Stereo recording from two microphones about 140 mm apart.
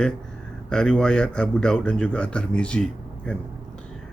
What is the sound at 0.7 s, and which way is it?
A man's voice, 5° left (ahead or behind).